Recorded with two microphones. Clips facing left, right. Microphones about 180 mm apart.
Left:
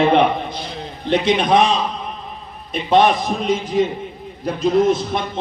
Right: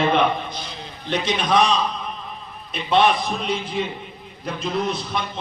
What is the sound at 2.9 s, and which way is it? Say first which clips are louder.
A man's voice: left 4 dB; 45° left (ahead or behind).